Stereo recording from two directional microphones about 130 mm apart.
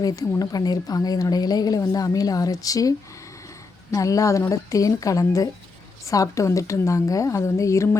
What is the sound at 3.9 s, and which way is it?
A woman's voice, 25° left (ahead or behind).